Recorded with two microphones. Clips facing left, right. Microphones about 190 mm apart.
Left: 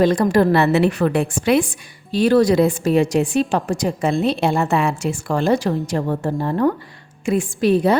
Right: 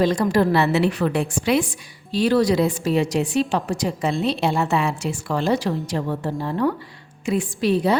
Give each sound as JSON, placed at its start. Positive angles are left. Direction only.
{"t": 0.0, "sound": "a woman's voice", "side_deg": 55}